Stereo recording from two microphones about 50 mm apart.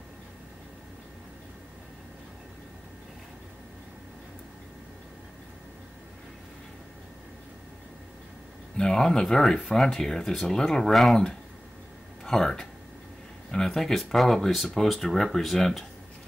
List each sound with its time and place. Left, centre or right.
8.7 s speech: centre
12.3 s speech: centre